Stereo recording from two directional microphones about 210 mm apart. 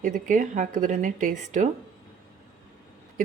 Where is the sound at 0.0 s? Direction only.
40° right (ahead or behind).